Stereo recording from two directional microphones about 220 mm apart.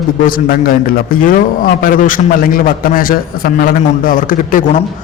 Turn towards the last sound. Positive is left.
turn(degrees=35)  # may be behind; listen again after turning